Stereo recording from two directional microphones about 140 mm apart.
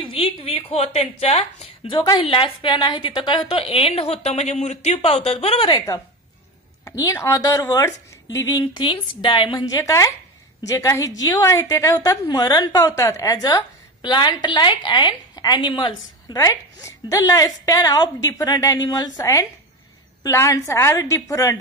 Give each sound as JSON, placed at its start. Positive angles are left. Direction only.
{"t": 0.0, "sound": "a sound", "side_deg": 40}
{"t": 1.9, "sound": "a woman's voice", "side_deg": 35}
{"t": 6.8, "sound": "a woman's voice", "side_deg": 20}
{"t": 8.8, "sound": "a woman's voice", "side_deg": 35}